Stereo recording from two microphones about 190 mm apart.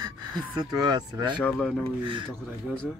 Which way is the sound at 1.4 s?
5° left (ahead or behind).